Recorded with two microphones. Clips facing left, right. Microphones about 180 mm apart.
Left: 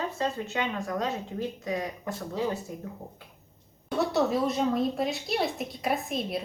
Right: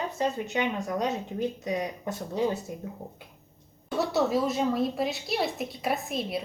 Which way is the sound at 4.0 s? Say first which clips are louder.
Even; centre (ahead or behind).